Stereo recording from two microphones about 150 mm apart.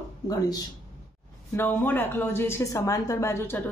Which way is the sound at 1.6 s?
15° left (ahead or behind).